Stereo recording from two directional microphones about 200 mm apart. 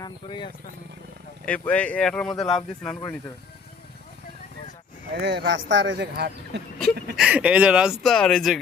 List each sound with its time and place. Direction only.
0.0 s speech: 25° left (ahead or behind)
1.5 s speech: 5° left (ahead or behind)
5.2 s speech: 60° right (ahead or behind)
7.2 s speech: 5° right (ahead or behind)